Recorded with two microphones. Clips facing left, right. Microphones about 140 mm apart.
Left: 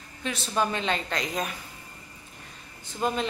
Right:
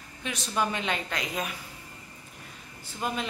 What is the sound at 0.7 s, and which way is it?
Speech, 10° right (ahead or behind).